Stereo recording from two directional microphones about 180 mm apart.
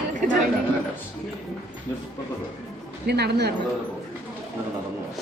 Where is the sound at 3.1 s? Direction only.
65° right (ahead or behind).